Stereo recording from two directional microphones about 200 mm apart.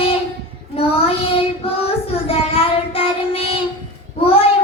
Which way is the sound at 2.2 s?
30° left (ahead or behind).